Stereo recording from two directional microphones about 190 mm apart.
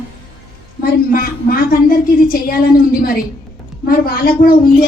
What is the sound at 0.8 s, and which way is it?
Speech, 50° left (ahead or behind).